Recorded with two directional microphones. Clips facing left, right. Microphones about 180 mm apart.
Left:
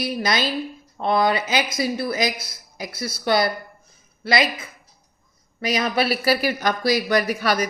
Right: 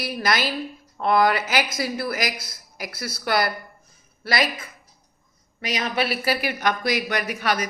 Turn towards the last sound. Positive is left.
turn(degrees=35)  # may be behind; listen again after turning